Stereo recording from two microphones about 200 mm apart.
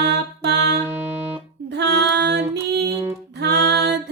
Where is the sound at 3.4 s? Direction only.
55° right (ahead or behind).